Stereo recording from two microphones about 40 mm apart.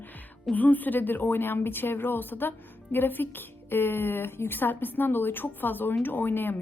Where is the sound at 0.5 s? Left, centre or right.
Left.